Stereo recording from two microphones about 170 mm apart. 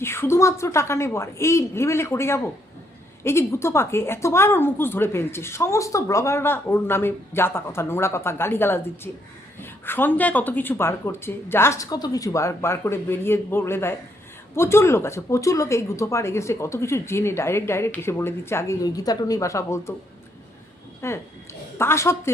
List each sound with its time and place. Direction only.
0.0 s a woman's voice: 15° left (ahead or behind)
21.0 s a woman's voice: 15° left (ahead or behind)